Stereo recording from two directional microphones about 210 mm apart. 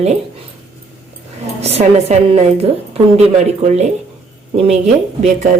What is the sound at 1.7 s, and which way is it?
A woman's voice, 30° right (ahead or behind).